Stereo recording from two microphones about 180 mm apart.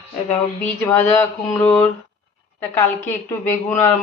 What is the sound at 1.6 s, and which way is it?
Speech, 10° left (ahead or behind).